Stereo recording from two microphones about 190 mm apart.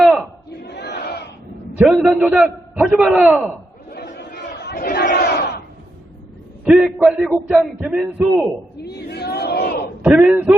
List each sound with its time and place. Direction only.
0.0 s battle cry: centre (ahead or behind)
0.5 s crowd: 60° left (ahead or behind)
1.8 s a man's voice: 5° right (ahead or behind)
3.8 s battle cry: 60° left (ahead or behind)
6.7 s a man's voice: 5° right (ahead or behind)
8.8 s battle cry: 60° left (ahead or behind)
10.0 s speech: 5° right (ahead or behind)